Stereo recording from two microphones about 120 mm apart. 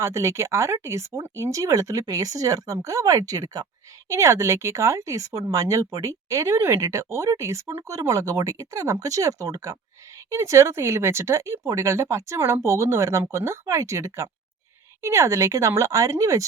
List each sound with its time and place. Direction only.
0.0 s speech: 25° right (ahead or behind)